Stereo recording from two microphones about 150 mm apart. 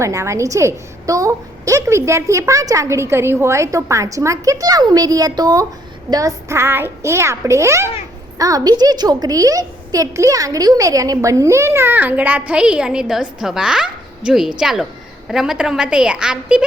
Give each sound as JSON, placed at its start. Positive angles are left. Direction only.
{"t": 0.0, "sound": "a woman's voice", "side_deg": -20}